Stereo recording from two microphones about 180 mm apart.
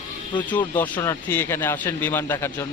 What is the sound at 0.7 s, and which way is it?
A man's voice, 10° left (ahead or behind).